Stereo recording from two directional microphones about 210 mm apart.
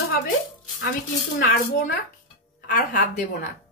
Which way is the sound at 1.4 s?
45° left (ahead or behind).